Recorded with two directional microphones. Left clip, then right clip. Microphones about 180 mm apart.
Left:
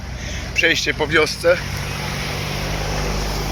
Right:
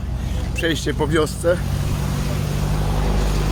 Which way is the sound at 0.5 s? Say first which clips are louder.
Left 6 dB; 25° right (ahead or behind).